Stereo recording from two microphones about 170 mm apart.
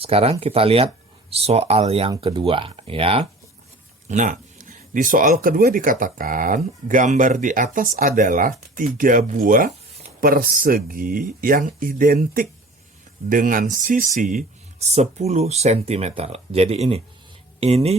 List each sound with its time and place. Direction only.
0.0 s speech: 35° right (ahead or behind)
4.1 s speech: 50° right (ahead or behind)